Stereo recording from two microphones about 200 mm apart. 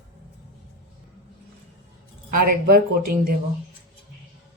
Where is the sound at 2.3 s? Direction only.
50° right (ahead or behind).